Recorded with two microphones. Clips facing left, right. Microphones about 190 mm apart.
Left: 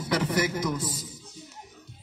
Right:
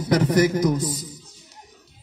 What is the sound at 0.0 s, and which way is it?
A man's voice, 40° right (ahead or behind).